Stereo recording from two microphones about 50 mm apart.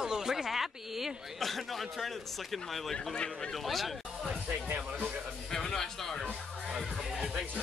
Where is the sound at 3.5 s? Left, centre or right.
Centre.